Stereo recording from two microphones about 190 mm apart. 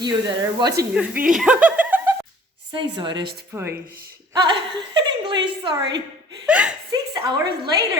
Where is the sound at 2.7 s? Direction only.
25° right (ahead or behind).